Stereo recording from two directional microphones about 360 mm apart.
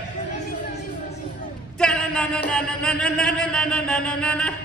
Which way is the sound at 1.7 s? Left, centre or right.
Centre.